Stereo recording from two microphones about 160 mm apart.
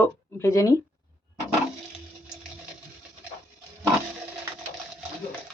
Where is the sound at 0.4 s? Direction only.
20° left (ahead or behind).